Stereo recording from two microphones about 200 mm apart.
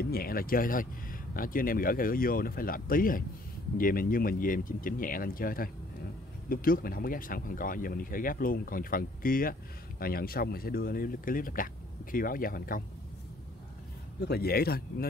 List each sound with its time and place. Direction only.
0.0 s speech: 50° left (ahead or behind)
14.2 s speech: 50° left (ahead or behind)